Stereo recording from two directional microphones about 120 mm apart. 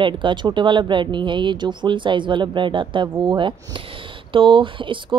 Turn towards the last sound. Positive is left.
turn(degrees=-45)  # may be behind; listen again after turning